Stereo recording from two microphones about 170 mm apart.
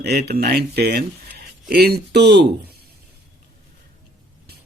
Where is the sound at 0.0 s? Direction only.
70° right (ahead or behind).